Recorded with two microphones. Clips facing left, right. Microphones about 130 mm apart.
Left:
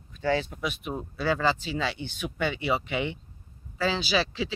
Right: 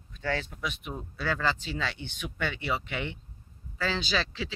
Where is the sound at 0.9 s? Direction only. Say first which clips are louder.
Left 6 dB; 20° left (ahead or behind).